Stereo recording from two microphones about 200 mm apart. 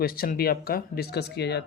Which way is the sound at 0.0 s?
45° left (ahead or behind).